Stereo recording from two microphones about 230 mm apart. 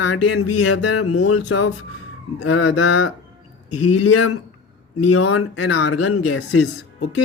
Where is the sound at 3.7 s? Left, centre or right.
Left.